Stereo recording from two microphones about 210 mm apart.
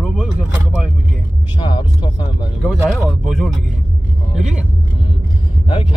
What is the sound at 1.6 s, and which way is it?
Speech, 20° left (ahead or behind).